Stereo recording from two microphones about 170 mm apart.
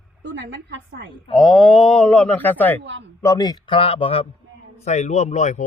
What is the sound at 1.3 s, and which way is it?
A man's voice, centre (ahead or behind).